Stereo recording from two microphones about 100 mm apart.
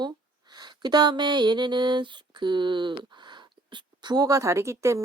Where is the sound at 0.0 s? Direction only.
45° right (ahead or behind).